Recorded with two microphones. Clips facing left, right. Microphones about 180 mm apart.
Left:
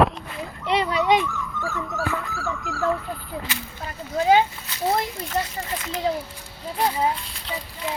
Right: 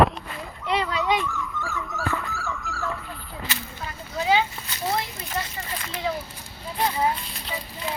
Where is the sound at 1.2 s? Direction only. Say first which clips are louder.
Left 2 dB; centre (ahead or behind).